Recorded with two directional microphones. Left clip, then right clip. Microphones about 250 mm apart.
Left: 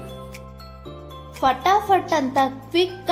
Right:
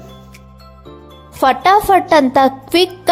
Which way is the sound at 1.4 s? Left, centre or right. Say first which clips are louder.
Right 7 dB; right.